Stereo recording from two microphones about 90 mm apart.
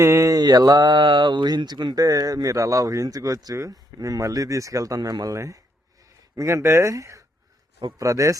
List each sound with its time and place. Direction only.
0.0 s speech: 35° right (ahead or behind)